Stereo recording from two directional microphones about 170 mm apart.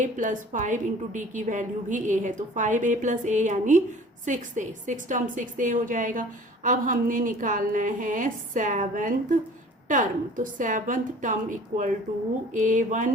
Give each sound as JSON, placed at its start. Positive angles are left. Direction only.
{"t": 0.0, "sound": "a woman's voice", "side_deg": -50}